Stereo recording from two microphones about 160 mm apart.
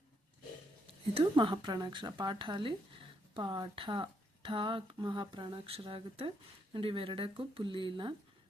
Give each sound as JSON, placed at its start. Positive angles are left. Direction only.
{"t": 1.1, "sound": "speech", "side_deg": -30}